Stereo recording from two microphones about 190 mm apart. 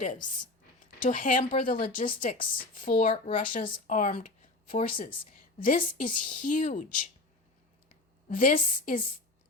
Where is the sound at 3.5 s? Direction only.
45° left (ahead or behind).